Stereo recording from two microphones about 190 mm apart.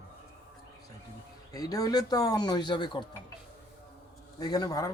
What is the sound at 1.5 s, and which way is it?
Speech, 20° left (ahead or behind).